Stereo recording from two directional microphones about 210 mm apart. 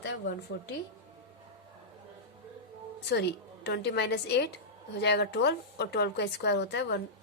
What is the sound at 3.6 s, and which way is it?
A woman's voice, 50° left (ahead or behind).